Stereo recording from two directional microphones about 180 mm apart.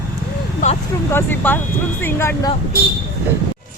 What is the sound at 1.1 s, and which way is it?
Speech, 10° left (ahead or behind).